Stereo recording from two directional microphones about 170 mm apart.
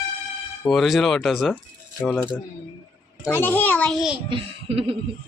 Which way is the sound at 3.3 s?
10° left (ahead or behind).